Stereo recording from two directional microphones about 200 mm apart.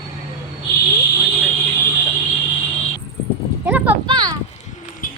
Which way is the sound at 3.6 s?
10° right (ahead or behind).